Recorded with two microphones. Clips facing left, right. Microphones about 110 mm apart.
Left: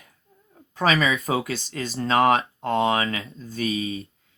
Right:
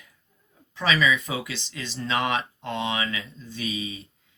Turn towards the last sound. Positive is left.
turn(degrees=50)  # may be behind; listen again after turning